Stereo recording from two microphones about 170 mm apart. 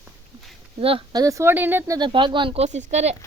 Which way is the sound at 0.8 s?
35° right (ahead or behind).